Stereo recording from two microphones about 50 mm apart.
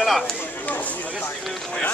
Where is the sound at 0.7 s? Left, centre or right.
Left.